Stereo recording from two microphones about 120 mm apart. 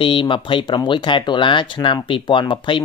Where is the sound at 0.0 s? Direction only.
45° left (ahead or behind).